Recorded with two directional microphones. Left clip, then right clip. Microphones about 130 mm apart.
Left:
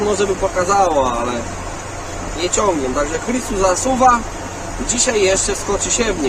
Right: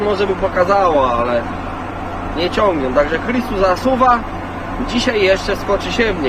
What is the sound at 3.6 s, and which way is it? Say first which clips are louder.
Fowl: even; 10° left (ahead or behind).